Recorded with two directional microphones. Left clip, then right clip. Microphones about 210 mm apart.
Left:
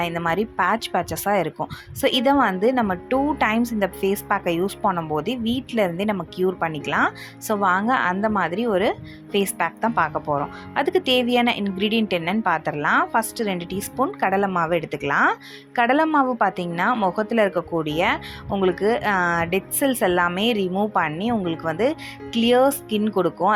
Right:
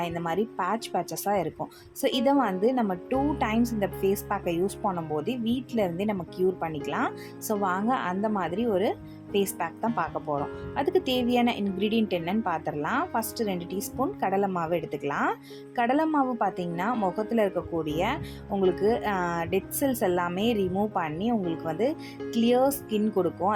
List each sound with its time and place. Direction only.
0.0 s speech: 10° left (ahead or behind)
4.8 s speech: 20° left (ahead or behind)
5.1 s speech: 10° left (ahead or behind)